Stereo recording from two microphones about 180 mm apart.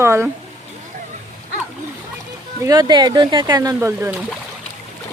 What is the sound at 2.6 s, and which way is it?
Speech, 20° right (ahead or behind).